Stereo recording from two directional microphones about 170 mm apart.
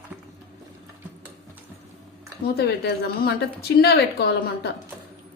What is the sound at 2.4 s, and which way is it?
A woman's voice, 70° left (ahead or behind).